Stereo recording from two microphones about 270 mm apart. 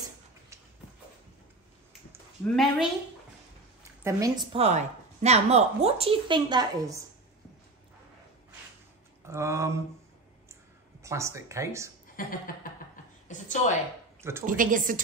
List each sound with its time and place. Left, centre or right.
2.4 s a woman's voice: centre
3.8 s a woman's voice: centre
9.2 s a sound: centre
11.0 s speech: centre
12.2 s a woman's voice: left
14.4 s a woman's voice: right